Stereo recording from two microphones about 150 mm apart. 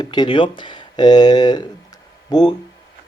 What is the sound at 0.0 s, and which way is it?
A man's voice, 30° left (ahead or behind).